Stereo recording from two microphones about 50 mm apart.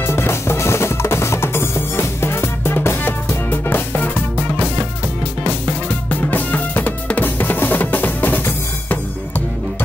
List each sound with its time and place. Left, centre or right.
0.0 s music: left
4.0 s music: left
5.5 s drum: left